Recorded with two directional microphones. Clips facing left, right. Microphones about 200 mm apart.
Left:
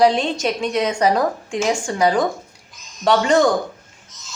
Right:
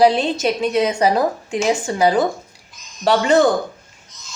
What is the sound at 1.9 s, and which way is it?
Speech, 30° right (ahead or behind).